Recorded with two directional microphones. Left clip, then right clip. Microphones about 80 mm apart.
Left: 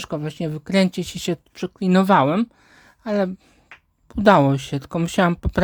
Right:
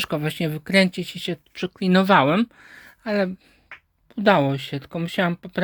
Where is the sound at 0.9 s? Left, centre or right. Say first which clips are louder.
Left 2 dB; left.